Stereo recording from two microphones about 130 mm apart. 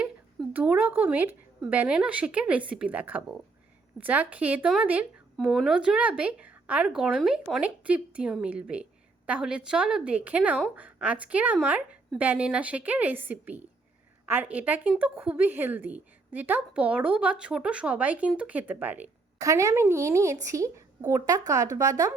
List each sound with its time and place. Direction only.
0.5 s a woman's voice: 10° right (ahead or behind)
19.4 s a woman's voice: 25° right (ahead or behind)